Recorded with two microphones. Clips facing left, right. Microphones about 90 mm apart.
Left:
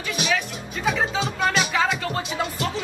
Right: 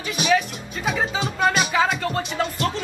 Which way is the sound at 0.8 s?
10° right (ahead or behind).